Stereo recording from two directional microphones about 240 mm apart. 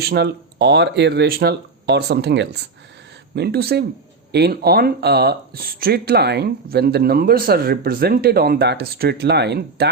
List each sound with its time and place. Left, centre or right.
0.0 s speech: right